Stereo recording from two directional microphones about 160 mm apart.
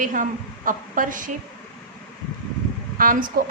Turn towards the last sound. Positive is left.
turn(degrees=-60)  # may be behind; listen again after turning